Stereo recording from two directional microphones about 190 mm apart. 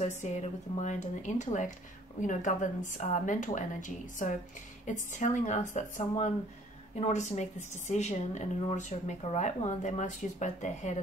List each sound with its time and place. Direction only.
0.2 s speech: 40° left (ahead or behind)